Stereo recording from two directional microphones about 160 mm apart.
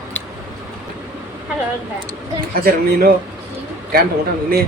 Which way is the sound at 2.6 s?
70° right (ahead or behind).